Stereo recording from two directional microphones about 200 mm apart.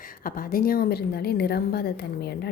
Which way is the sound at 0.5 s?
45° left (ahead or behind).